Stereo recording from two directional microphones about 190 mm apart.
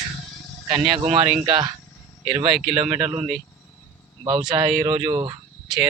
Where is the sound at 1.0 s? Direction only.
35° right (ahead or behind).